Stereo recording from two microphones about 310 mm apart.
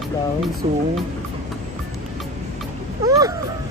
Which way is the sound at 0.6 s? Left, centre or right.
Centre.